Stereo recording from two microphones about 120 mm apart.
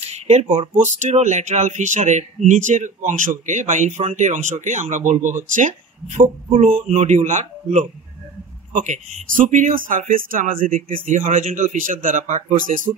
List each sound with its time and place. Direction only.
0.0 s speech: 65° right (ahead or behind); by 6.2 s 90° right
6.5 s speech: 65° right (ahead or behind); by 12.9 s 90° right